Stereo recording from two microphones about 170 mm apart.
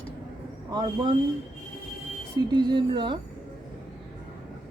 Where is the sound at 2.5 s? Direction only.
25° right (ahead or behind).